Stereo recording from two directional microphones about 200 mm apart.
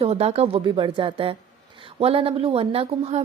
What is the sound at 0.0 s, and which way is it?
A woman's voice, 30° right (ahead or behind).